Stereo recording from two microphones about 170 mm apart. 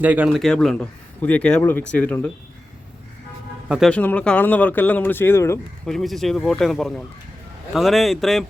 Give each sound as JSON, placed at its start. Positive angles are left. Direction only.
{"t": 0.0, "sound": "speech", "side_deg": -10}
{"t": 3.7, "sound": "speech", "side_deg": 0}
{"t": 3.9, "sound": "speech", "side_deg": 10}
{"t": 5.8, "sound": "speech", "side_deg": 0}